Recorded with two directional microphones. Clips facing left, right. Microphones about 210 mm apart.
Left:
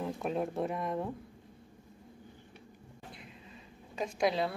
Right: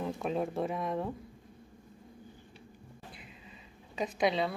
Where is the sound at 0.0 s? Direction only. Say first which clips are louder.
Right 1 dB; centre (ahead or behind).